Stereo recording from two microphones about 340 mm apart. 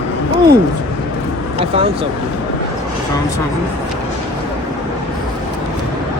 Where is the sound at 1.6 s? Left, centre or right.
Centre.